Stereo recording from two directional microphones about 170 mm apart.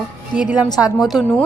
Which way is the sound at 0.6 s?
25° left (ahead or behind).